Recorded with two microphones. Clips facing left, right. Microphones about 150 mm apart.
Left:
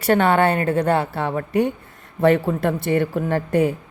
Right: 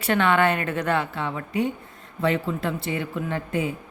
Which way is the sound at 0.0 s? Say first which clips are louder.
Left 4 dB; 40° left (ahead or behind).